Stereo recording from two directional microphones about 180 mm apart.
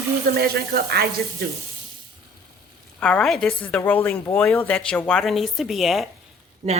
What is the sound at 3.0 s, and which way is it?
A woman's voice, 5° left (ahead or behind).